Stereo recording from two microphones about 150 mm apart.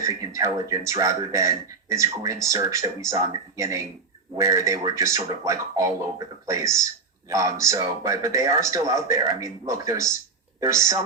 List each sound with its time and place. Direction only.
0.0 s speech: 20° right (ahead or behind)